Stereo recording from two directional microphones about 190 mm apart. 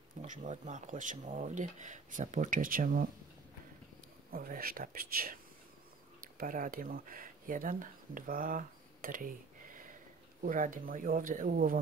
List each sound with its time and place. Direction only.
0.2 s speech: 40° right (ahead or behind)
4.3 s speech: 50° right (ahead or behind)
10.4 s speech: 45° right (ahead or behind)